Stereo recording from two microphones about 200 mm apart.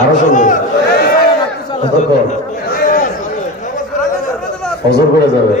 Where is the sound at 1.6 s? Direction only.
30° left (ahead or behind).